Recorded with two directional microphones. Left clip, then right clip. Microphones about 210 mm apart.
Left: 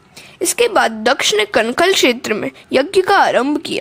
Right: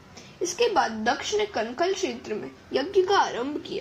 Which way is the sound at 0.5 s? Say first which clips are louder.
Left 9 dB; 55° left (ahead or behind).